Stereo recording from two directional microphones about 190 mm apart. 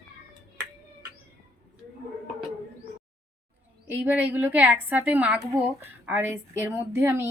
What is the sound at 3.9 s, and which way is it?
A woman's voice, 10° right (ahead or behind).